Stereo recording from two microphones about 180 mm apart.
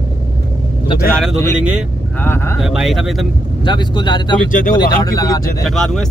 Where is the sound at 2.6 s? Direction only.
Centre (ahead or behind).